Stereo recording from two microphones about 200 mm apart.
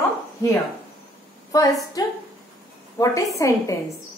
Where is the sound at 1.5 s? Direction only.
15° left (ahead or behind).